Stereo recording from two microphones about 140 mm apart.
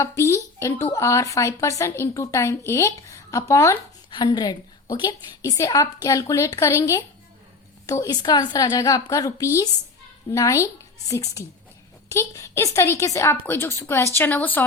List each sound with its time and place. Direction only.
0.2 s speech: 20° left (ahead or behind)
4.1 s speech: 30° left (ahead or behind); by 14.6 s 15° left (ahead or behind)